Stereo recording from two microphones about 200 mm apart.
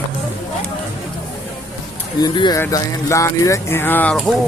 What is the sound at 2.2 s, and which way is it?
Speech, 20° left (ahead or behind).